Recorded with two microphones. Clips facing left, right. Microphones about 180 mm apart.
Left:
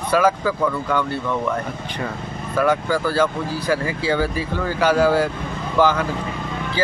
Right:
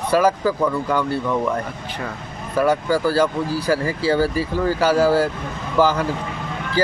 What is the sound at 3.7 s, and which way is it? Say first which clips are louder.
Speech: right 1 dB; 35° right (ahead or behind).